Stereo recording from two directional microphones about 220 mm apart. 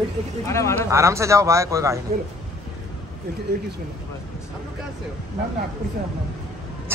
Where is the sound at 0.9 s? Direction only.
15° right (ahead or behind).